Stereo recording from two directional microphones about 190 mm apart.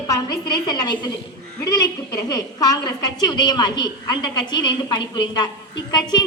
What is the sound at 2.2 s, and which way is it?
A woman's voice, 20° left (ahead or behind).